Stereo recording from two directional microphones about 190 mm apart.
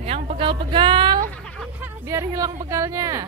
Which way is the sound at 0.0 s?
35° right (ahead or behind).